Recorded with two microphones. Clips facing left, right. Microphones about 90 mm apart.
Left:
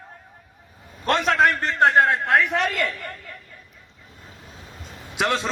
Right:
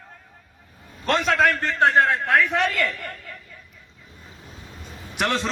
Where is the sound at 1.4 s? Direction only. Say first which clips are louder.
Left 2 dB; 15° left (ahead or behind).